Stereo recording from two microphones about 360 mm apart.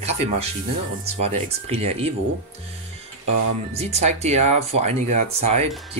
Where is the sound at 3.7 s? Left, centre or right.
Centre.